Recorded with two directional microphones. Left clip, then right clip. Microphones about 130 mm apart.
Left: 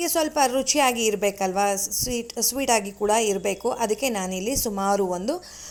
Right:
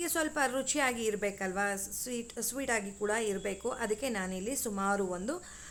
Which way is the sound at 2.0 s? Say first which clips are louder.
Left 10 dB; 30° left (ahead or behind).